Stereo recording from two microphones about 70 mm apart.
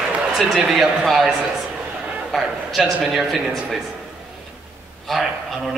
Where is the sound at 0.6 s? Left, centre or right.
Centre.